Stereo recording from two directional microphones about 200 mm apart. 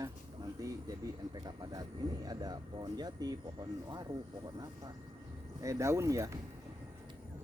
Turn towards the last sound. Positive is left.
turn(degrees=-15)  # may be behind; listen again after turning